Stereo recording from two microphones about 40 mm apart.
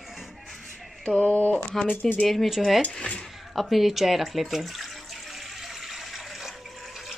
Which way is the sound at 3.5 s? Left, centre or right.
Centre.